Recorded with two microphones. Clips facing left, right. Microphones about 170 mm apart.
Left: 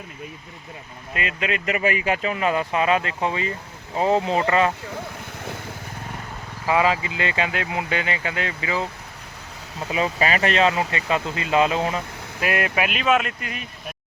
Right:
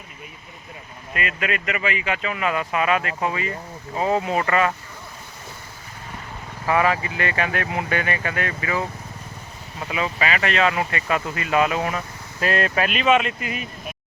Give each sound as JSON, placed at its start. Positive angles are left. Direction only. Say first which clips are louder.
{"t": 1.1, "sound": "speech", "louder": "even", "side_deg": 25}
{"t": 6.7, "sound": "speech", "louder": "even", "side_deg": 20}
{"t": 9.9, "sound": "speech", "louder": "left 2 dB", "side_deg": 35}
{"t": 12.5, "sound": "speech", "louder": "right 1 dB", "side_deg": 15}